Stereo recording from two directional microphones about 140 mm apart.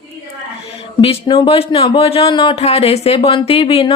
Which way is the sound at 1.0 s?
35° left (ahead or behind).